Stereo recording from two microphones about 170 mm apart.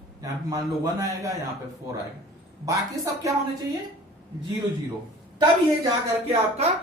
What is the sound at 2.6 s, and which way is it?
Speech, 20° right (ahead or behind).